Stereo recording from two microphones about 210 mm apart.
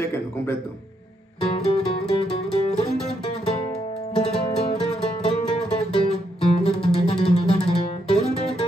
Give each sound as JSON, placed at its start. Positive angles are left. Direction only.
{"t": 0.0, "sound": "a man's voice", "side_deg": 10}
{"t": 1.5, "sound": "music", "side_deg": 30}